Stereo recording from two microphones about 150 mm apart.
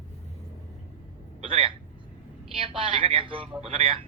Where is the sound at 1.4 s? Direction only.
40° right (ahead or behind).